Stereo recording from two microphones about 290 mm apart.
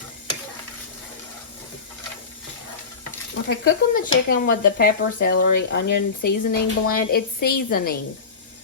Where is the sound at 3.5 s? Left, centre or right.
Left.